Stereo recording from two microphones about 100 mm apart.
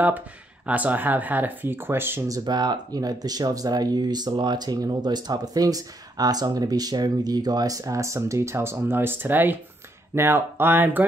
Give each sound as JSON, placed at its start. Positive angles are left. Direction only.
{"t": 0.7, "sound": "speech", "side_deg": -15}
{"t": 2.2, "sound": "speech", "side_deg": -40}